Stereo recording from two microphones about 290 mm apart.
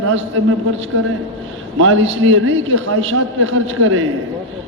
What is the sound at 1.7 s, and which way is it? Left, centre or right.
A man's voice, right.